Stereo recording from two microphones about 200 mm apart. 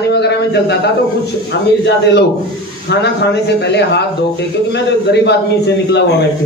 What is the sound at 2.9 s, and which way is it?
A man's voice, 55° left (ahead or behind).